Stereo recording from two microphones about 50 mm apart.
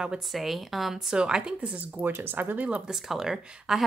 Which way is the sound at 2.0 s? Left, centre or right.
Right.